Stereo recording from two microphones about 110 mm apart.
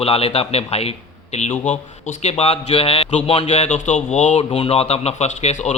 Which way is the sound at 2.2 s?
75° left (ahead or behind).